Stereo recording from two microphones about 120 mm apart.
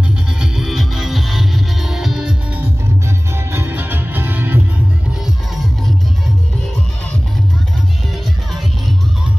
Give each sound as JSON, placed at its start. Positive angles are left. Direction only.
{"t": 0.4, "sound": "music", "side_deg": 0}
{"t": 3.3, "sound": "music", "side_deg": -20}